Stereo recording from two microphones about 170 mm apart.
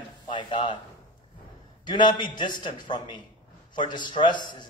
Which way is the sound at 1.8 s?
25° left (ahead or behind).